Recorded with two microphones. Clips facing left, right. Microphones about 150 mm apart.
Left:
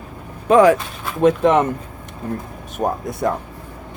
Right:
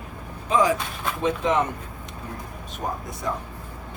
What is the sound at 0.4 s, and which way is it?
Speech, 65° left (ahead or behind).